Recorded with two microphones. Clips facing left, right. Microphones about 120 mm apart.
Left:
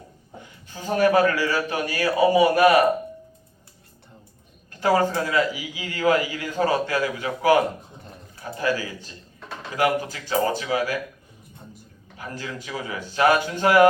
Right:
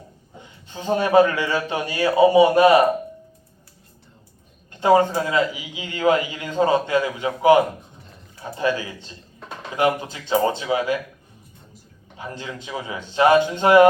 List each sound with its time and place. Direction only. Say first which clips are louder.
0.3 s speech: right 3 dB; 25° right (ahead or behind)
4.7 s speech: right 4 dB; 20° right (ahead or behind)
12.1 s speech: right 1 dB; 20° right (ahead or behind)